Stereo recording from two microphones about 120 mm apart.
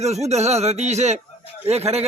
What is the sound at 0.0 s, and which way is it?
A man's voice, 65° right (ahead or behind).